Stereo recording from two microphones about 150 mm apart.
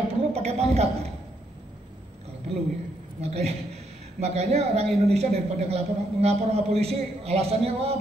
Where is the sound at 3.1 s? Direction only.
45° right (ahead or behind).